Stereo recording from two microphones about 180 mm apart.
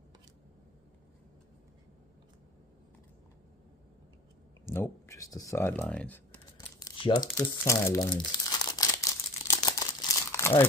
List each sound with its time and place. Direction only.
4.6 s speech: 15° left (ahead or behind)
7.0 s speech: 25° left (ahead or behind)
7.3 s speech: 15° left (ahead or behind)
9.5 s crumpling: 20° left (ahead or behind)